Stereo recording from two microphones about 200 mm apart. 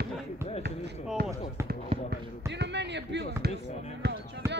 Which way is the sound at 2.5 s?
60° right (ahead or behind).